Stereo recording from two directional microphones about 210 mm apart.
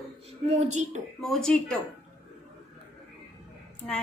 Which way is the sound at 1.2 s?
Centre (ahead or behind).